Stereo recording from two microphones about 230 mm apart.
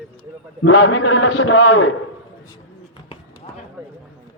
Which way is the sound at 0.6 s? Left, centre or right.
Left.